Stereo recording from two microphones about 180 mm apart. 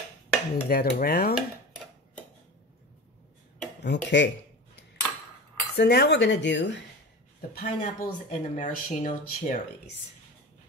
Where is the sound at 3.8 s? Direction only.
80° left.